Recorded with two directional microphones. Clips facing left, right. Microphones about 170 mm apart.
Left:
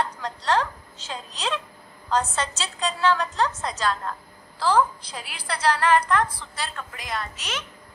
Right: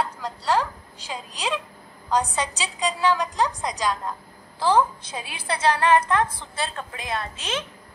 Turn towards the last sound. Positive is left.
turn(degrees=-30)  # may be behind; listen again after turning